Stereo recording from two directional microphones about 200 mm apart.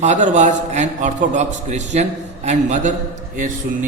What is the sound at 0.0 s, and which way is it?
A man's voice, 35° right (ahead or behind).